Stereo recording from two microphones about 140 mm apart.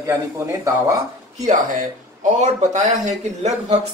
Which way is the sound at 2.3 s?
55° right (ahead or behind).